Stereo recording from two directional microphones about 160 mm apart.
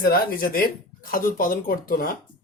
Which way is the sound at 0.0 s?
65° left (ahead or behind).